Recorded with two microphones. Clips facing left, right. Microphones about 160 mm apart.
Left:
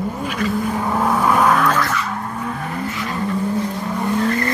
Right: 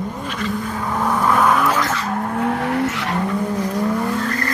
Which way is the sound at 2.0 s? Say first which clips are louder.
Right 5 dB; 55° right (ahead or behind).